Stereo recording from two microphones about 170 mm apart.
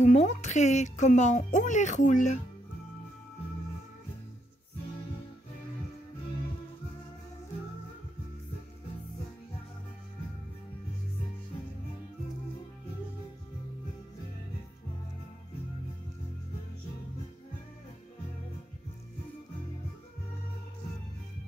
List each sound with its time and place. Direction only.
0.0 s speech: 45° left (ahead or behind)